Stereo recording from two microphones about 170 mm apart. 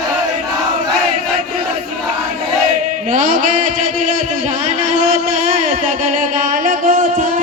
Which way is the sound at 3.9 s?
45° right (ahead or behind).